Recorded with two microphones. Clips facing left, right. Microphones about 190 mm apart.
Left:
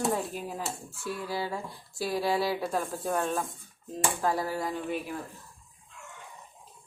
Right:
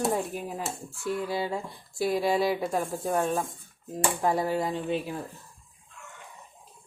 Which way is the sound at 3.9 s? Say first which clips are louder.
Right 2 dB; 15° right (ahead or behind).